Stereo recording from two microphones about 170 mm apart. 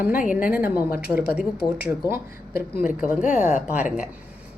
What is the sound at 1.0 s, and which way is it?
Speech, 65° left (ahead or behind).